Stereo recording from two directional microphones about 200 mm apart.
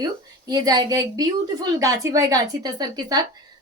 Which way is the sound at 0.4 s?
20° right (ahead or behind).